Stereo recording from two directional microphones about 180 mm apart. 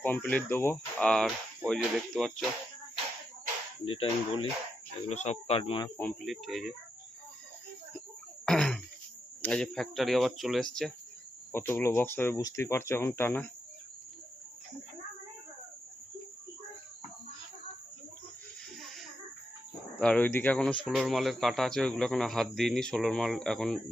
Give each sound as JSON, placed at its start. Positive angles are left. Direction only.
{"t": 0.0, "sound": "speech", "side_deg": 10}
{"t": 3.8, "sound": "speech", "side_deg": 30}
{"t": 6.2, "sound": "speech", "side_deg": 0}
{"t": 8.4, "sound": "a sound", "side_deg": 5}
{"t": 9.4, "sound": "speech", "side_deg": 5}
{"t": 11.5, "sound": "speech", "side_deg": 15}
{"t": 20.0, "sound": "speech", "side_deg": 5}